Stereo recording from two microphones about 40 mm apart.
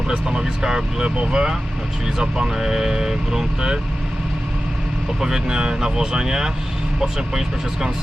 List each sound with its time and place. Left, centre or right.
0.1 s speech: centre
5.2 s speech: centre